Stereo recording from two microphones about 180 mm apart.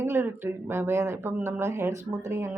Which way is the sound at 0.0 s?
15° right (ahead or behind).